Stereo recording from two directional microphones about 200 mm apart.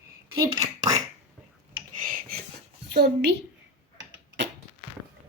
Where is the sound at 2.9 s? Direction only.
55° right (ahead or behind).